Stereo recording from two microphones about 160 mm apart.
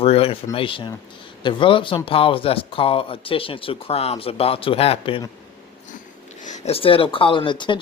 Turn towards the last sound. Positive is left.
turn(degrees=30)  # may be behind; listen again after turning